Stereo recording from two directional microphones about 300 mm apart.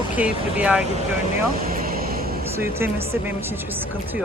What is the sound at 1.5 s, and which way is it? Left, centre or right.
Vehicle, right.